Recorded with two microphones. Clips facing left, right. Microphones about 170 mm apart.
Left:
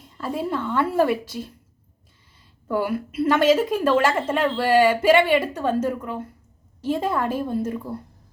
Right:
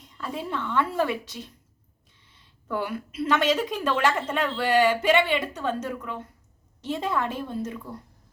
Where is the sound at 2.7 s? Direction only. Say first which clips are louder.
Left 6 dB; 5° left (ahead or behind).